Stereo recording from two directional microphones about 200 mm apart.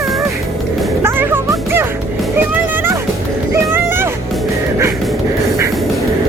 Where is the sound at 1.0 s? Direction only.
10° right (ahead or behind).